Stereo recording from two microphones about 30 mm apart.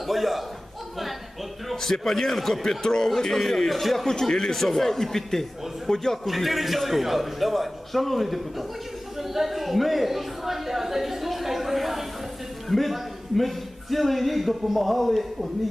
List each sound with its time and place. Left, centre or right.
0.0 s a man's voice: centre
1.7 s a man's voice: centre
4.0 s speech: centre
6.2 s a man's voice: centre
9.1 s a sound: centre
13.9 s a man's voice: centre